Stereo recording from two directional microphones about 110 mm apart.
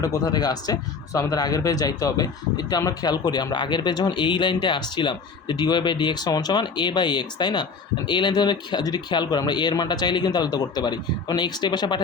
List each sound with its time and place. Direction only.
0.0 s speech: 35° left (ahead or behind)